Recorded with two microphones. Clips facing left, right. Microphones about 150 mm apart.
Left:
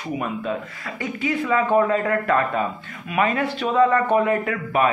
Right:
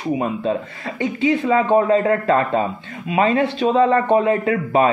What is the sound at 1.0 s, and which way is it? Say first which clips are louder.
A man's voice: right 6 dB; 25° right (ahead or behind).